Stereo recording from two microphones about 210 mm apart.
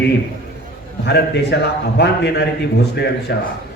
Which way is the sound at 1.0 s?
55° left (ahead or behind).